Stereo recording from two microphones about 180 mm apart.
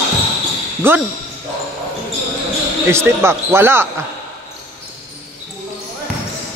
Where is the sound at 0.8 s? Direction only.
10° right (ahead or behind).